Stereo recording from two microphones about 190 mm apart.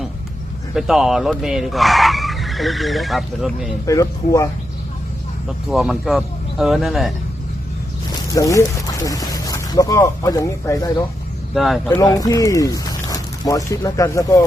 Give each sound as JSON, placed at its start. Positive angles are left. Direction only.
{"t": 0.7, "sound": "speech", "side_deg": 0}
{"t": 3.8, "sound": "speech", "side_deg": 15}
{"t": 5.6, "sound": "speech", "side_deg": 0}
{"t": 8.3, "sound": "speech", "side_deg": 15}
{"t": 11.5, "sound": "speech", "side_deg": 0}
{"t": 11.9, "sound": "speech", "side_deg": 15}